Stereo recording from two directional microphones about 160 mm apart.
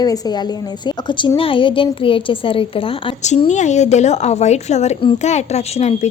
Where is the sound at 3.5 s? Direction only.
45° left (ahead or behind).